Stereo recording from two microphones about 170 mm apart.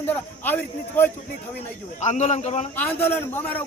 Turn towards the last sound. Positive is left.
turn(degrees=10)  # may be behind; listen again after turning